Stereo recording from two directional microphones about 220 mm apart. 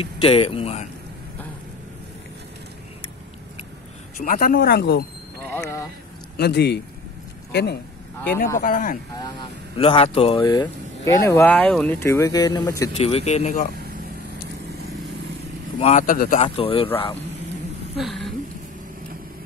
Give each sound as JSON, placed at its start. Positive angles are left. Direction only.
{"t": 0.0, "sound": "speech", "side_deg": 25}
{"t": 4.2, "sound": "speech", "side_deg": 40}
{"t": 5.4, "sound": "a sound", "side_deg": 10}
{"t": 6.3, "sound": "a man's voice", "side_deg": 45}
{"t": 9.8, "sound": "speech", "side_deg": 25}
{"t": 12.9, "sound": "speech", "side_deg": 25}
{"t": 15.8, "sound": "a man's voice", "side_deg": 35}
{"t": 16.4, "sound": "speech", "side_deg": 25}
{"t": 17.9, "sound": "a woman's voice", "side_deg": 0}